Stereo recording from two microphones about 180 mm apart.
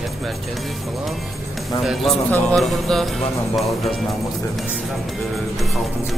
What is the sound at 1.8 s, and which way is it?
Speech, centre (ahead or behind).